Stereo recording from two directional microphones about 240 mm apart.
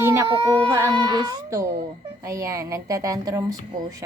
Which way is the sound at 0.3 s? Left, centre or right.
Right.